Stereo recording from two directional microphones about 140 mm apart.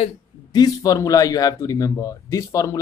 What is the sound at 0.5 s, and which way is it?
Speech, 25° left (ahead or behind).